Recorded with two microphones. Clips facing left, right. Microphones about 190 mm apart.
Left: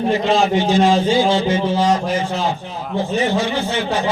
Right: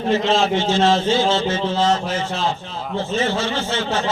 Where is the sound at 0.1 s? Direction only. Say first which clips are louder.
Even; 15° left (ahead or behind).